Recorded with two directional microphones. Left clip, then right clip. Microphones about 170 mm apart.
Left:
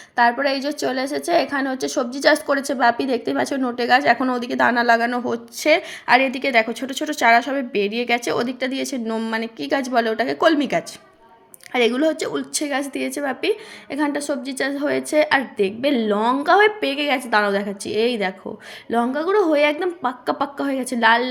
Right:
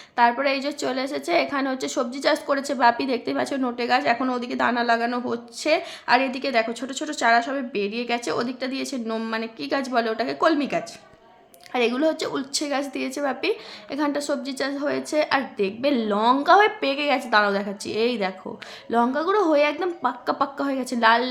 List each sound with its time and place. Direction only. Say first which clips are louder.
0.2 s a woman's voice: left 2 dB; 15° left (ahead or behind)